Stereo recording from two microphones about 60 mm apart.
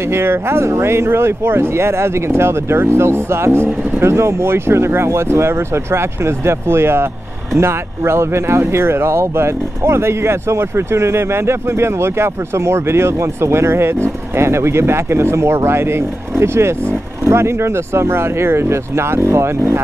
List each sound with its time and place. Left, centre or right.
0.1 s speech: right